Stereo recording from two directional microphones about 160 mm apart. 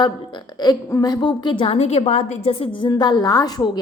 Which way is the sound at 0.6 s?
20° left (ahead or behind).